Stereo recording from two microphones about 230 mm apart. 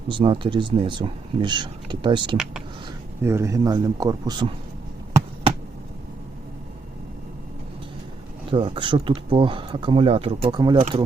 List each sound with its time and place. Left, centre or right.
0.1 s speech: right
8.4 s speech: right